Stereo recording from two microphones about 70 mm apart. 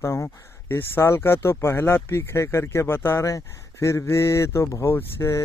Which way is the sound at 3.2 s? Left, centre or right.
Left.